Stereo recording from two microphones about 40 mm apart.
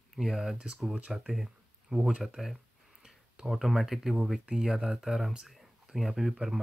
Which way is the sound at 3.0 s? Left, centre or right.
Centre.